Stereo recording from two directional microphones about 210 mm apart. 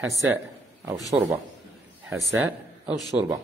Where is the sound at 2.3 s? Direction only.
10° right (ahead or behind).